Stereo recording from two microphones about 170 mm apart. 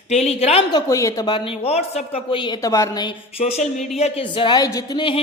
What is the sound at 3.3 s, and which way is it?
Speech, 40° left (ahead or behind).